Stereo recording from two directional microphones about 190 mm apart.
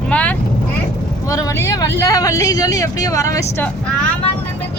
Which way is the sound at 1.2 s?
20° left (ahead or behind).